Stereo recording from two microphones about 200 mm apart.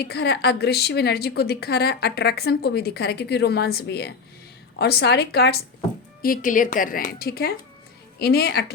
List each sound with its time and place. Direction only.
0.0 s a woman's voice: 55° left (ahead or behind)
6.2 s a woman's voice: 45° left (ahead or behind)